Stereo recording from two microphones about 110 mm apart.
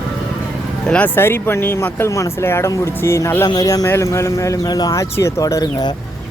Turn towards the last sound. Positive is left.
turn(degrees=40)  # may be behind; listen again after turning